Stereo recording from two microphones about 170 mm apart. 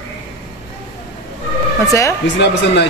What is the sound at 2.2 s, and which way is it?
Speech, 90° left.